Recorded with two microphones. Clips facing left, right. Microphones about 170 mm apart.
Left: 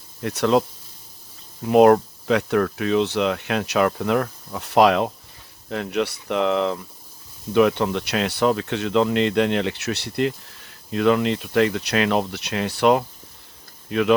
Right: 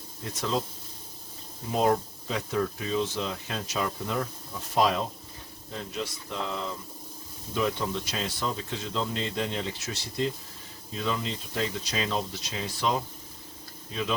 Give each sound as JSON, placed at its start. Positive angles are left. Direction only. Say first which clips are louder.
{"t": 0.2, "sound": "speech", "louder": "left 11 dB", "side_deg": 70}
{"t": 1.6, "sound": "speech", "louder": "left 11 dB", "side_deg": 70}